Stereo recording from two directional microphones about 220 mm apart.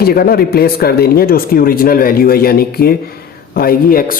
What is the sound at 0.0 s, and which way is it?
Speech, 45° left (ahead or behind).